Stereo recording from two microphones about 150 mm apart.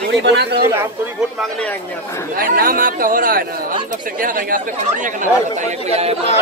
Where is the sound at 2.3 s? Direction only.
75° right (ahead or behind); by 6.1 s 45° right (ahead or behind).